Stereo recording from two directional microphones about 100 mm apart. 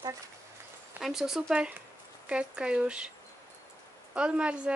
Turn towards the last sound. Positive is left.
turn(degrees=-10)  # may be behind; listen again after turning